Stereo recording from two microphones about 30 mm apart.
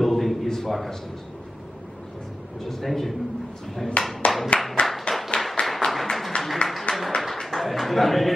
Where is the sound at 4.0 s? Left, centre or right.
Left.